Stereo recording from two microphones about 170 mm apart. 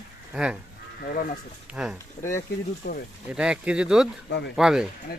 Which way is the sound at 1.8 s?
Centre (ahead or behind).